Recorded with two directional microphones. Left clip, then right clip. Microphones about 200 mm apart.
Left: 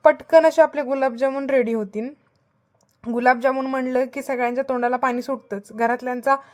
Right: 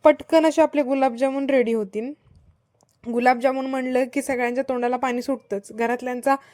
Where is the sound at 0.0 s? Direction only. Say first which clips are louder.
Left 2 dB; 40° right (ahead or behind).